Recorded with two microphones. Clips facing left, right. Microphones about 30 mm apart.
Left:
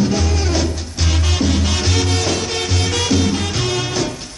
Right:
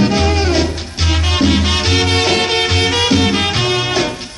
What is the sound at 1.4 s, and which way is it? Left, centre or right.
Music, right.